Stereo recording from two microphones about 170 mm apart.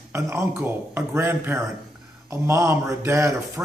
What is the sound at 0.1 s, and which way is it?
A man's voice, 15° right (ahead or behind).